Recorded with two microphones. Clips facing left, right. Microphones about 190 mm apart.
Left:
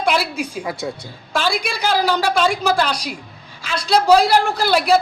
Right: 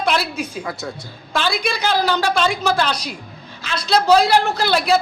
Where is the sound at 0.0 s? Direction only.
10° left (ahead or behind).